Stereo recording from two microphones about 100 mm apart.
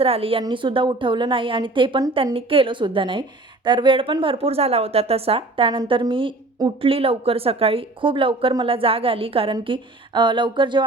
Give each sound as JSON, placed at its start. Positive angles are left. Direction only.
{"t": 0.0, "sound": "speech", "side_deg": -70}
{"t": 0.5, "sound": "a woman's voice", "side_deg": -55}
{"t": 6.8, "sound": "a woman's voice", "side_deg": -70}